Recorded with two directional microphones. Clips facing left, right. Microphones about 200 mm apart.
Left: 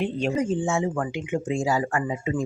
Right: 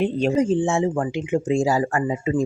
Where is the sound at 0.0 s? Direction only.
35° right (ahead or behind).